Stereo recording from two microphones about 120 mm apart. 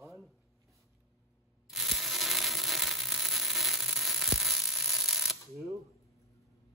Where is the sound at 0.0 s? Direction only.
Centre (ahead or behind).